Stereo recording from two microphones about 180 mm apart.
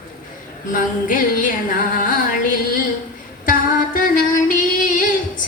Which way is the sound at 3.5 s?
50° left (ahead or behind).